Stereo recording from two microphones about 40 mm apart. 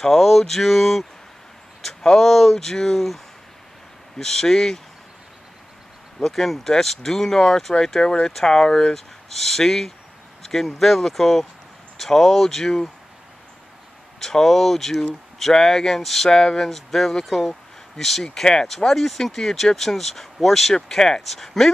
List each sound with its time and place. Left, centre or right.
0.0 s a sound: centre
1.8 s speech: centre
4.2 s speech: centre
6.1 s speech: centre
14.2 s speech: centre
20.7 s speech: centre
21.2 s a sound: centre